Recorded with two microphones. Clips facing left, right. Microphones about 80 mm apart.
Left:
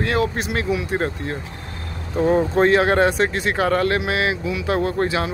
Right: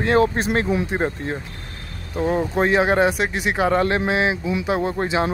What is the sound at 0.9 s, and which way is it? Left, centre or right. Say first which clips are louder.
Speech: even; right.